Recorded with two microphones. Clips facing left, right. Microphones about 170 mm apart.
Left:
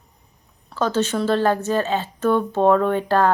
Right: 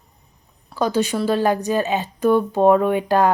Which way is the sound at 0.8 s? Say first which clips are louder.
Right 1 dB; 10° right (ahead or behind).